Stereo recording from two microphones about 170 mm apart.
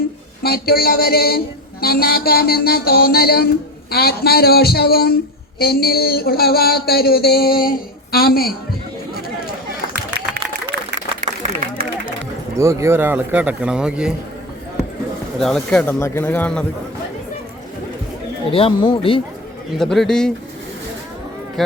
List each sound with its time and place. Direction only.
0.4 s speech: 65° left (ahead or behind)
9.9 s run: 65° right (ahead or behind)
12.5 s speech: 15° right (ahead or behind)
15.4 s speech: 5° left (ahead or behind)
18.5 s speech: 30° left (ahead or behind)
19.8 s speech: 5° left (ahead or behind)